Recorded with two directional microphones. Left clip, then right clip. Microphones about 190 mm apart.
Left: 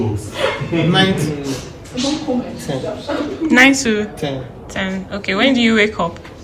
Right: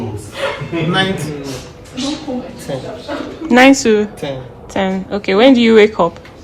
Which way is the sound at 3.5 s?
25° right (ahead or behind).